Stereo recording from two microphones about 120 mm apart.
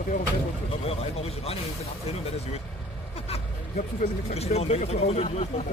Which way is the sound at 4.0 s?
60° left (ahead or behind).